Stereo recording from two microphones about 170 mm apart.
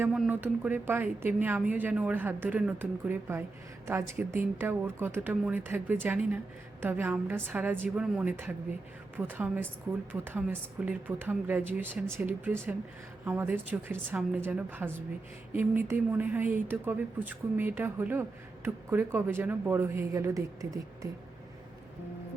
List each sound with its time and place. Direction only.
0.0 s speech: 10° right (ahead or behind)